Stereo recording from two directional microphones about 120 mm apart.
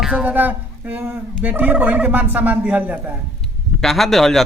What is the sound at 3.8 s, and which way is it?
Speech, centre (ahead or behind).